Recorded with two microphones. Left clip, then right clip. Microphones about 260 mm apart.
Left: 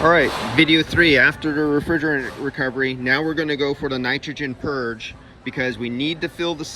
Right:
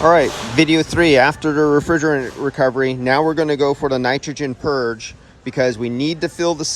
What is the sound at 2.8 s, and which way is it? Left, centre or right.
Speech, centre.